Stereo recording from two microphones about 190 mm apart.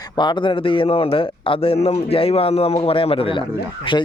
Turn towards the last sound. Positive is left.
turn(degrees=25)  # may be behind; listen again after turning